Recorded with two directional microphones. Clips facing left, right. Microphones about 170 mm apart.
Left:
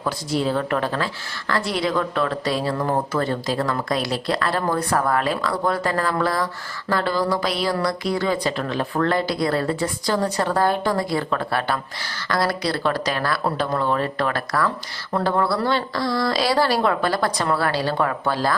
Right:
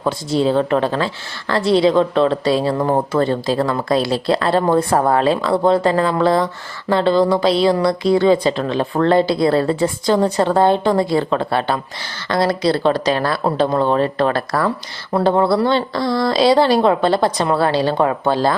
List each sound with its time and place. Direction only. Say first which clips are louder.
0.0 s a woman's voice: right 6 dB; 25° right (ahead or behind)